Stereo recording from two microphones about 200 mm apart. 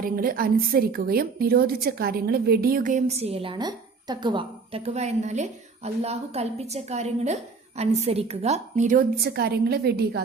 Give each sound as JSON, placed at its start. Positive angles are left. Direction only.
{"t": 0.0, "sound": "a woman's voice", "side_deg": -45}